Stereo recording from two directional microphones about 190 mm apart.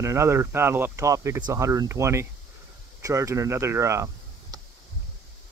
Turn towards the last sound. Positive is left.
turn(degrees=-15)  # may be behind; listen again after turning